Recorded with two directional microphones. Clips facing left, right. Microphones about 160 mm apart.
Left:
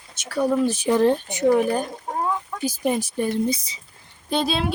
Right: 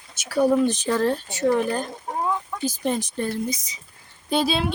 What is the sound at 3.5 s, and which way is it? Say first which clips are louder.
Speech: left 5 dB; 30° left (ahead or behind).